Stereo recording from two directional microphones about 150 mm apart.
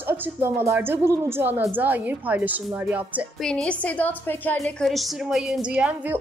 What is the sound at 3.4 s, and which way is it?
A woman's voice, 5° left (ahead or behind).